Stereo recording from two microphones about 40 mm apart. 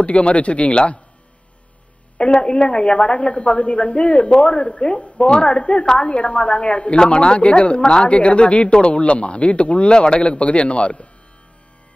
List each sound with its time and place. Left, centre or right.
0.0 s speech: left
2.1 s a woman's voice: left